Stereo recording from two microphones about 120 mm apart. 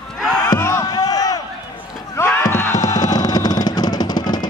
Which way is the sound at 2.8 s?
30° left (ahead or behind).